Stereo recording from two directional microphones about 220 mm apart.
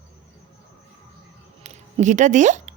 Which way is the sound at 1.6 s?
30° right (ahead or behind).